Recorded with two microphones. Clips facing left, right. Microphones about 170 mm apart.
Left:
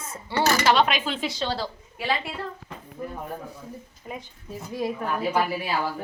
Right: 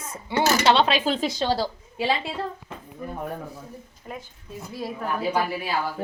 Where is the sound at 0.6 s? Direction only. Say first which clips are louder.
Right 2 dB; 30° right (ahead or behind).